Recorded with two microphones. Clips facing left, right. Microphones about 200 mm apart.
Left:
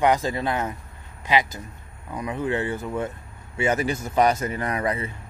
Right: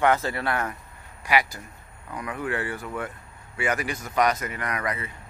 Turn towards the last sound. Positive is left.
turn(degrees=30)  # may be behind; listen again after turning